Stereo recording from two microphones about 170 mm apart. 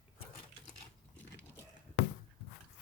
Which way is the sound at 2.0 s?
90° left.